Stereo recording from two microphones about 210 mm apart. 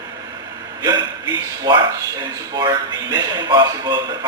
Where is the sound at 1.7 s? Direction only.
20° right (ahead or behind).